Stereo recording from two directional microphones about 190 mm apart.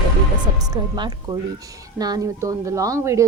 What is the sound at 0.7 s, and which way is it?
Speech, 20° right (ahead or behind).